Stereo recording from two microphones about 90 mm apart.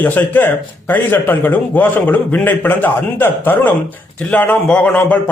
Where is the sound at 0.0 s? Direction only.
20° left (ahead or behind).